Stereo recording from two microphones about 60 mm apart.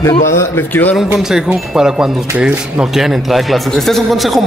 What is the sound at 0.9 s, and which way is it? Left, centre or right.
A man's voice, centre.